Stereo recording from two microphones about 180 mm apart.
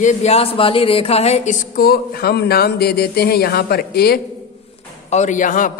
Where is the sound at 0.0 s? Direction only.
40° left (ahead or behind); by 4.2 s 60° left (ahead or behind).